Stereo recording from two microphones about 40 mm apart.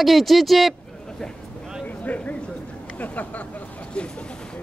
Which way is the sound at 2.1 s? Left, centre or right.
Left.